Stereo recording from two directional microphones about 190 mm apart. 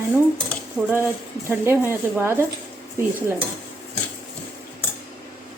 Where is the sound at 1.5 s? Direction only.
10° right (ahead or behind).